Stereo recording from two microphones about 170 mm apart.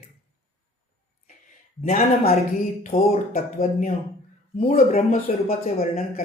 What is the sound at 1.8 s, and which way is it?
Speech, 60° left (ahead or behind).